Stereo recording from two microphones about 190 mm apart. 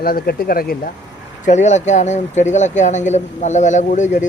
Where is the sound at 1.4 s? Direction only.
35° left (ahead or behind).